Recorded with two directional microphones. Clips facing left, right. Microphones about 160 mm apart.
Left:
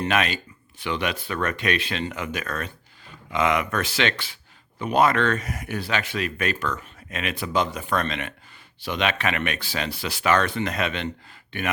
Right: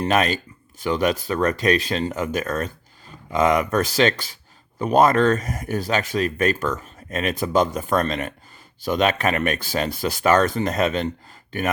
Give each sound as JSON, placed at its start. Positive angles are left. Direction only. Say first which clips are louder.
{"t": 0.0, "sound": "speech", "louder": "right 4 dB", "side_deg": -40}